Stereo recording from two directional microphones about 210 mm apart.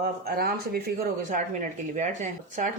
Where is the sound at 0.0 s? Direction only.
45° right (ahead or behind).